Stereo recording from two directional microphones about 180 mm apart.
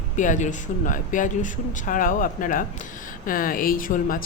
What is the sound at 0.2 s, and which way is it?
A woman's voice, 45° left (ahead or behind).